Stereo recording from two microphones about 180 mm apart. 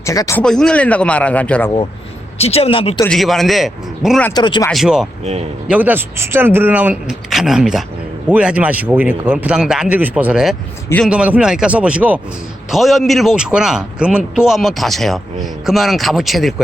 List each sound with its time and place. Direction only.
0.0 s speech: 20° left (ahead or behind)
0.4 s speech: 5° left (ahead or behind)
2.4 s speech: 35° left (ahead or behind)
3.1 s a man's voice: centre (ahead or behind)
4.4 s speech: 25° left (ahead or behind)
4.7 s a man's voice: centre (ahead or behind)
5.2 s speech: 35° right (ahead or behind)
5.6 s a man's voice: 10° right (ahead or behind)